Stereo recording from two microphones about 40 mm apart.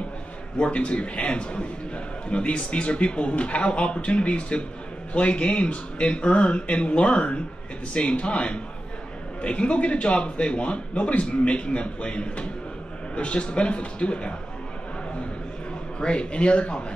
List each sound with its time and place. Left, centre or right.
0.6 s speech: left
16.0 s speech: left